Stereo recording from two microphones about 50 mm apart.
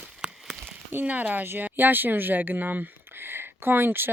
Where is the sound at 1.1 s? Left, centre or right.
Right.